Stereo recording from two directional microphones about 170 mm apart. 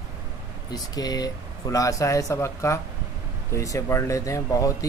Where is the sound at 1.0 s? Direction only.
20° left (ahead or behind).